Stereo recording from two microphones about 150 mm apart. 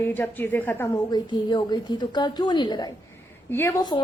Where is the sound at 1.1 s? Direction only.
30° left (ahead or behind).